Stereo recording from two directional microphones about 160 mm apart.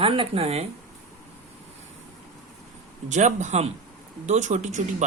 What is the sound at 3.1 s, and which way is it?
Speech, 50° right (ahead or behind).